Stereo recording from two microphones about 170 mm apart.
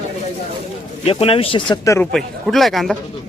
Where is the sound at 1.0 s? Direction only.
35° left (ahead or behind); by 2.0 s 20° left (ahead or behind).